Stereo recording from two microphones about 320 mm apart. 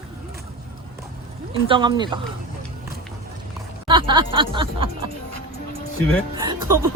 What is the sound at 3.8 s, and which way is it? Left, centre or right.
Speech, centre.